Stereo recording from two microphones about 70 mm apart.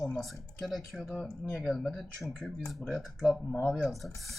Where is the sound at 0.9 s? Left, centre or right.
Centre.